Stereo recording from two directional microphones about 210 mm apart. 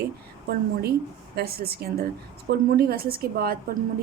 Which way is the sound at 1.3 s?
50° right (ahead or behind).